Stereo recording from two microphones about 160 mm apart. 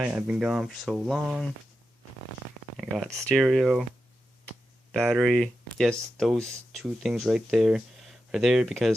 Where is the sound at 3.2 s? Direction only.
Centre (ahead or behind).